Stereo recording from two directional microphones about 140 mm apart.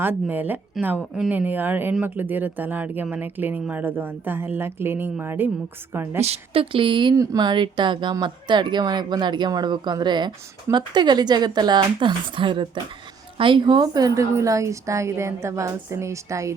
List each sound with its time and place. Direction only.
0.0 s speech: 15° right (ahead or behind)
6.2 s a woman's voice: 45° right (ahead or behind); by 16.6 s 20° right (ahead or behind)